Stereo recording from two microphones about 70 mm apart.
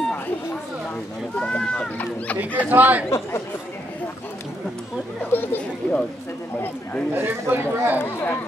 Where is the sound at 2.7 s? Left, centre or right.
Right.